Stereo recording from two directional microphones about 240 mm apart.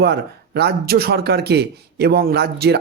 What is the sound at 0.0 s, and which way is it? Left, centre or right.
Speech, right.